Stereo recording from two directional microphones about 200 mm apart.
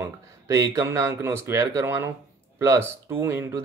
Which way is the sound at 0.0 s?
15° right (ahead or behind).